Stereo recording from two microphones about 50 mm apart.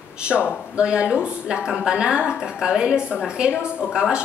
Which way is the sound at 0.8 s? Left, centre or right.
Right.